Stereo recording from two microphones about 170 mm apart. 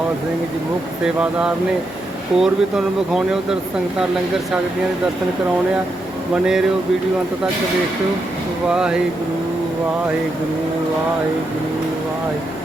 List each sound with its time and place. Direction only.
1.0 s speech: 5° right (ahead or behind)
6.3 s speech: 5° right (ahead or behind)
8.7 s speech: 5° right (ahead or behind)